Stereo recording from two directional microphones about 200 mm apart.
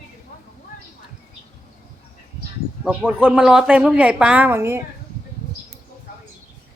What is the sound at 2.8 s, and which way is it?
Speech, 5° right (ahead or behind).